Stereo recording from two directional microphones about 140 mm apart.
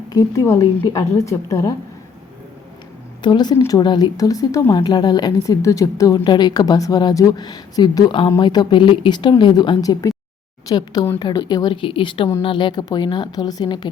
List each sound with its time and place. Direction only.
0.1 s a woman's voice: 25° left (ahead or behind)
3.2 s a woman's voice: 30° left (ahead or behind)